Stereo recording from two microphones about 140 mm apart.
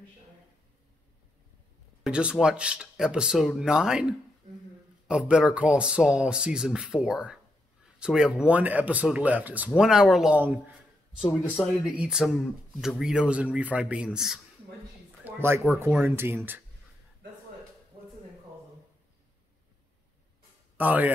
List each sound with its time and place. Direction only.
2.0 s speech: 5° right (ahead or behind)
12.0 s speech: 5° right (ahead or behind)
15.2 s speech: 15° right (ahead or behind)
20.7 s a man's voice: 10° right (ahead or behind)